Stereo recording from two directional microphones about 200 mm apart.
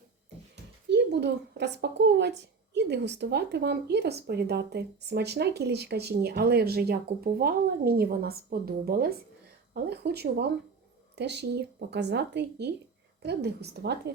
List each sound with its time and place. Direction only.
0.9 s speech: 55° right (ahead or behind)